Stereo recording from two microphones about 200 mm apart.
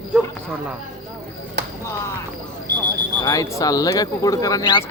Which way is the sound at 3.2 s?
15° left (ahead or behind).